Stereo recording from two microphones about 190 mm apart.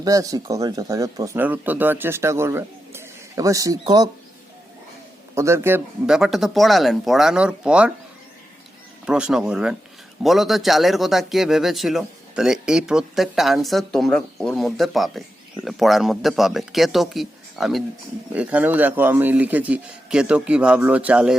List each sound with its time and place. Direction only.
0.0 s speech: 20° right (ahead or behind)
5.3 s a man's voice: 15° right (ahead or behind)
9.0 s a man's voice: 5° right (ahead or behind)